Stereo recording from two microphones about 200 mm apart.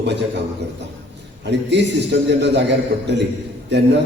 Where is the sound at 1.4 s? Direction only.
60° right (ahead or behind).